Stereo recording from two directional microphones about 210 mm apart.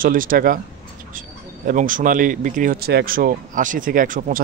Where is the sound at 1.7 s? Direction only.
40° right (ahead or behind).